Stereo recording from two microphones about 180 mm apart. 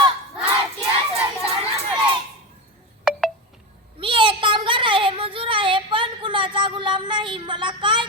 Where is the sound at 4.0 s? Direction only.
30° right (ahead or behind).